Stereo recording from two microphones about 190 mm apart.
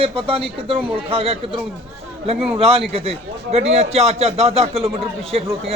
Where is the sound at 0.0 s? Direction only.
30° right (ahead or behind).